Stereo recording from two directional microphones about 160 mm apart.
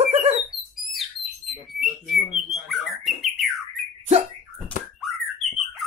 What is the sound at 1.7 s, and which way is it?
Bird, centre (ahead or behind).